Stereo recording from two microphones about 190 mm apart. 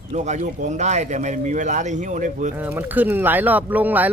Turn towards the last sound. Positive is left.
turn(degrees=-10)  # may be behind; listen again after turning